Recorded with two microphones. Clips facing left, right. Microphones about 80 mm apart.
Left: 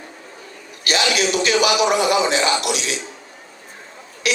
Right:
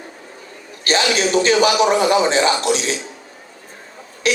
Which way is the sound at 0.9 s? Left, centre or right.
Right.